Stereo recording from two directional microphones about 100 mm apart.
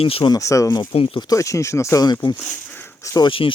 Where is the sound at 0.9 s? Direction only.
70° left (ahead or behind).